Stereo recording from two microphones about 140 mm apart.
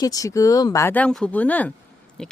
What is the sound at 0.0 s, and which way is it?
Speech, 25° left (ahead or behind).